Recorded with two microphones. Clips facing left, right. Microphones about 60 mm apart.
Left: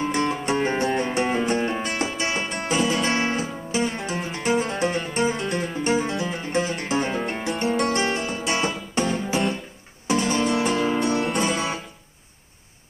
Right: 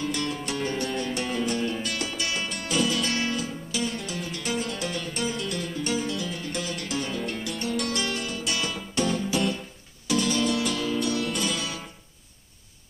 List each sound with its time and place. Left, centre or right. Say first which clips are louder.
0.0 s music: left 6 dB; left